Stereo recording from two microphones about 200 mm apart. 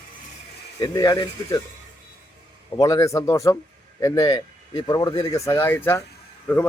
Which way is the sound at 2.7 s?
15° left (ahead or behind).